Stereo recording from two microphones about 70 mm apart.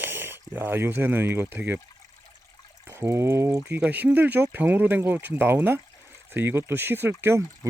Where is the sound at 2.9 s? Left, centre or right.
Right.